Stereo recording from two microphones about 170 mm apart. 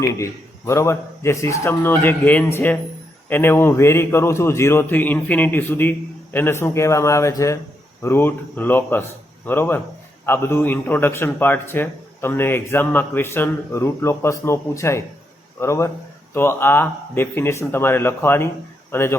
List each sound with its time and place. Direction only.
0.0 s a man's voice: 15° left (ahead or behind)